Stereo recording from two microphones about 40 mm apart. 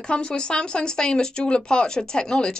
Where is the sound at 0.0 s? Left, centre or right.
Left.